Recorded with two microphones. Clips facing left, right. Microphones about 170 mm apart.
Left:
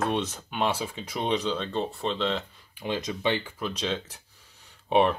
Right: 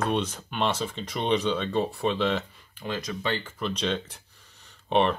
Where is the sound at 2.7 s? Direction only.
20° left (ahead or behind).